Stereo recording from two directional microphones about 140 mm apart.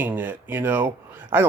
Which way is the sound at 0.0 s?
10° right (ahead or behind).